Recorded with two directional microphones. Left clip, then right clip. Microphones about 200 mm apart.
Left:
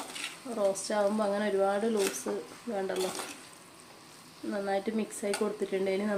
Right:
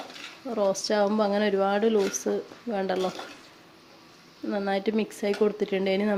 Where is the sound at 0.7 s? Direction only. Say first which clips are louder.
Right 5 dB; 40° right (ahead or behind).